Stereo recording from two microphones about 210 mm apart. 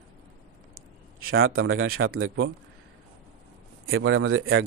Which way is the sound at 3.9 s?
70° right (ahead or behind).